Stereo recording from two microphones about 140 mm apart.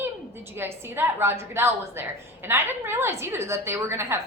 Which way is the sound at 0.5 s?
15° right (ahead or behind).